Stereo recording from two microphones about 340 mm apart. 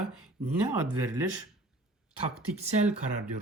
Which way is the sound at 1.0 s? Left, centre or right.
Centre.